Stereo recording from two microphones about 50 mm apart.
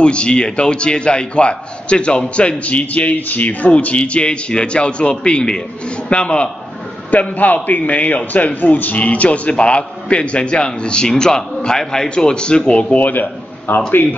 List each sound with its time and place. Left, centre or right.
0.0 s a man's voice: left
13.0 s a man's voice: left